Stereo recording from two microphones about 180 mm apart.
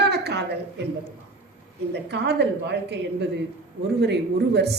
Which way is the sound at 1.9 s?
70° right (ahead or behind).